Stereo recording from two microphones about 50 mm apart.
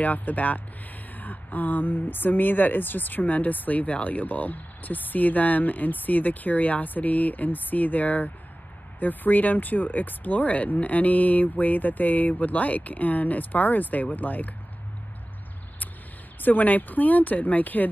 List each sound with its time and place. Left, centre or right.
0.0 s speech: left
16.3 s speech: left